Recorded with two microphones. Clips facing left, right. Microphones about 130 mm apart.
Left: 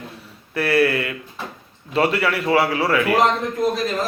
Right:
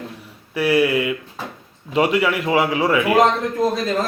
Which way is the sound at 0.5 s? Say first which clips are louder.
Right 1 dB; 15° right (ahead or behind).